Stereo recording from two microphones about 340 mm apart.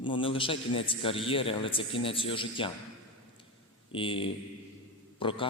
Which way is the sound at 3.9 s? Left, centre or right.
Centre.